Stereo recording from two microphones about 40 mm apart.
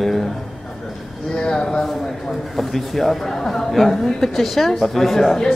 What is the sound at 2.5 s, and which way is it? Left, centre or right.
A woman's voice, centre.